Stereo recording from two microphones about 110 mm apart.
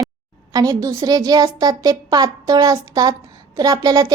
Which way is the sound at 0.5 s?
35° right (ahead or behind).